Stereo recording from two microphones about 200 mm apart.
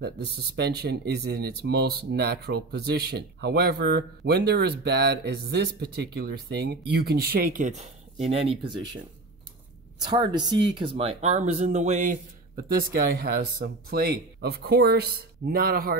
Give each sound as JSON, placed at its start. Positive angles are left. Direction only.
{"t": 0.0, "sound": "speech", "side_deg": -55}
{"t": 10.1, "sound": "speech", "side_deg": -20}
{"t": 12.9, "sound": "speech", "side_deg": -50}